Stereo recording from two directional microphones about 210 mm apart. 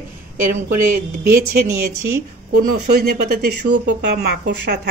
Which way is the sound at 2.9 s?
50° right (ahead or behind).